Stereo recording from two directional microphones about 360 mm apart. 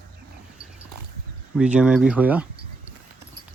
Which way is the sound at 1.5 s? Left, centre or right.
Centre.